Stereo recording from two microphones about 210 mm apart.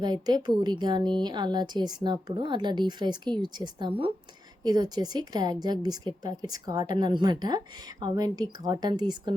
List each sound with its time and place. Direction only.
0.0 s a woman's voice: 20° right (ahead or behind)